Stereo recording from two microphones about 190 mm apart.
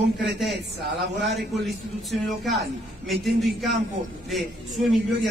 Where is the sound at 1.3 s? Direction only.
60° right (ahead or behind).